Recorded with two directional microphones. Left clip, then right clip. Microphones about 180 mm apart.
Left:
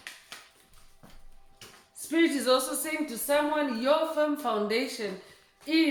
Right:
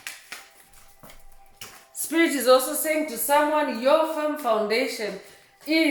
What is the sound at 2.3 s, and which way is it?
Speech, 25° left (ahead or behind).